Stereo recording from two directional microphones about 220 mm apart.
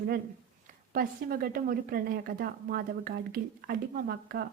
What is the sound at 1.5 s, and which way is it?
Speech, 40° right (ahead or behind).